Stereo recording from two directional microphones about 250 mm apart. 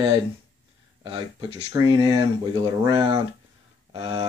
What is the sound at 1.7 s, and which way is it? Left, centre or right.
Speech, centre.